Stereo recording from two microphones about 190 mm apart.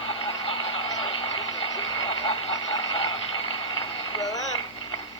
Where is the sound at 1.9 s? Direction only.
25° left (ahead or behind).